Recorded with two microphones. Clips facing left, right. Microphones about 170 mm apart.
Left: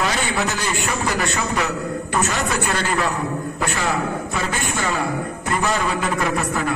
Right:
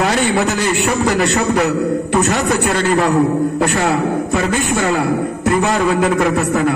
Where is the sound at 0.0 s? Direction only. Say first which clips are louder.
Right 7 dB; 65° right (ahead or behind).